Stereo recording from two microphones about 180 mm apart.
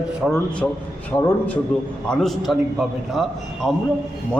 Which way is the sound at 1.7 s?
5° left (ahead or behind).